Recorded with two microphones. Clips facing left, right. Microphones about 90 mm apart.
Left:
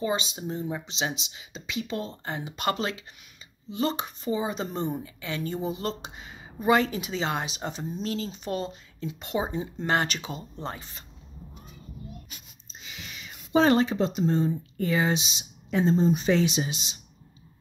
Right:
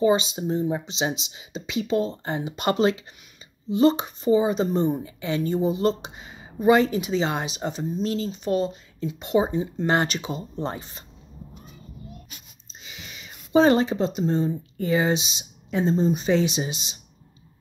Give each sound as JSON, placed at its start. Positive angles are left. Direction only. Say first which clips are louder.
{"t": 0.0, "sound": "a woman's voice", "louder": "right 8 dB", "side_deg": -20}
{"t": 10.5, "sound": "speech", "louder": "right 6 dB", "side_deg": -20}
{"t": 12.8, "sound": "speech", "louder": "even", "side_deg": -10}